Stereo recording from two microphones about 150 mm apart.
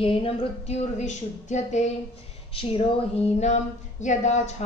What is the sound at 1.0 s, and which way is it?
Speech, 50° left (ahead or behind).